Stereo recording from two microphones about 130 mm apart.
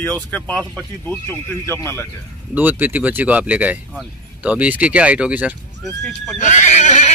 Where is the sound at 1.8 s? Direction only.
20° left (ahead or behind).